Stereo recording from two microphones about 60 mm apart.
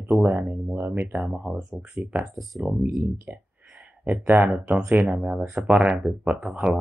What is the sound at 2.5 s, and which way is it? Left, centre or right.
Speech, centre.